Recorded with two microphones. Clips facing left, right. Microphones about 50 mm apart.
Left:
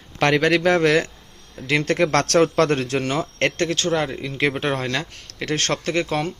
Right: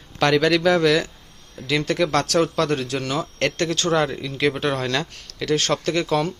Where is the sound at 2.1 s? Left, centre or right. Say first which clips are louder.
Left 2 dB; left.